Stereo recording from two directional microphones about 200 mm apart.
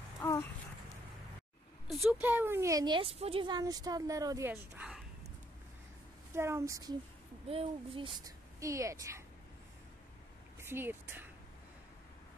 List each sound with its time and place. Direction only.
0.2 s a sound: 10° left (ahead or behind)
1.9 s a woman's voice: centre (ahead or behind)
6.3 s a woman's voice: 15° right (ahead or behind)
8.5 s a woman's voice: 15° right (ahead or behind)
10.6 s speech: 10° right (ahead or behind)